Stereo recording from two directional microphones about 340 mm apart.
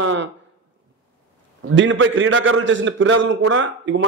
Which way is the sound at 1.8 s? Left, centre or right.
Right.